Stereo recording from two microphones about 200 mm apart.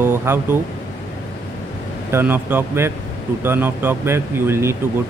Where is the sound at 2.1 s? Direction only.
10° right (ahead or behind).